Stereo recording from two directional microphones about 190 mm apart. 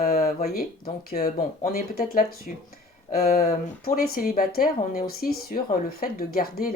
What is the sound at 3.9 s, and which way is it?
Speech, 50° left (ahead or behind).